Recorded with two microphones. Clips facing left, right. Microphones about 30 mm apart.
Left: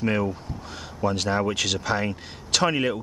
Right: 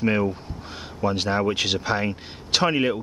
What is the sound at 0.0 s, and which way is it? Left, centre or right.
Speech, centre.